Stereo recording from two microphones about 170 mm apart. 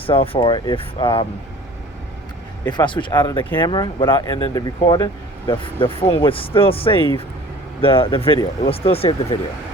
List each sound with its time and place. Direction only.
0.0 s speech: 30° left (ahead or behind)
2.6 s speech: 25° left (ahead or behind)